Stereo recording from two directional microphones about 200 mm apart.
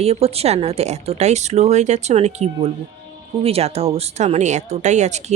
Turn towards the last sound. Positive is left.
turn(degrees=-35)  # may be behind; listen again after turning